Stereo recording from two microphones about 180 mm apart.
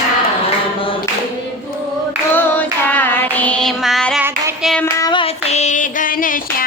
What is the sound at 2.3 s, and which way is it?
Child singing, 10° left (ahead or behind).